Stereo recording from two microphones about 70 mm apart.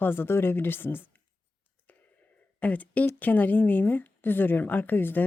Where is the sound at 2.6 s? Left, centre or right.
Left.